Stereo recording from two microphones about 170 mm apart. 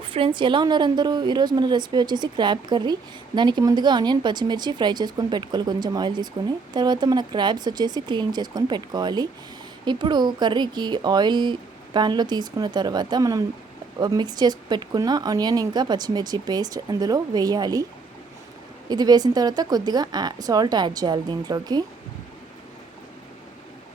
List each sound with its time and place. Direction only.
0.0 s a woman's voice: 30° right (ahead or behind)
18.9 s a woman's voice: 25° right (ahead or behind)